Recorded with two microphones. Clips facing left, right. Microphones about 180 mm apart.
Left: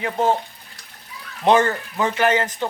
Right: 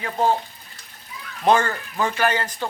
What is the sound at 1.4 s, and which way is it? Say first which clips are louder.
Speech: left 2 dB; 20° left (ahead or behind).